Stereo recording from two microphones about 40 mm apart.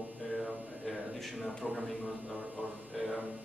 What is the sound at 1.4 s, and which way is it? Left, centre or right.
Speech, left.